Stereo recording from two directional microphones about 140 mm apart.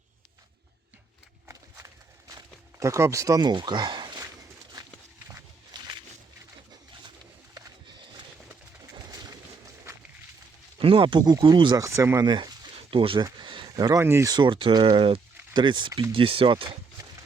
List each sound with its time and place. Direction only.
1.5 s walk: 20° right (ahead or behind)
4.8 s a sound: 30° right (ahead or behind)
8.9 s pigeon: 25° right (ahead or behind)
10.8 s speech: 40° right (ahead or behind)
13.4 s a sound: 35° right (ahead or behind)
14.0 s speech: 20° right (ahead or behind)
14.3 s speech: 35° right (ahead or behind)